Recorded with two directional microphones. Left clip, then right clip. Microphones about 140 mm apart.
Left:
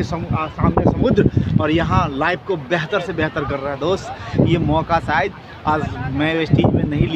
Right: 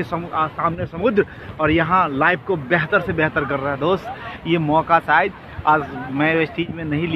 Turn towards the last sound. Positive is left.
turn(degrees=20)  # may be behind; listen again after turning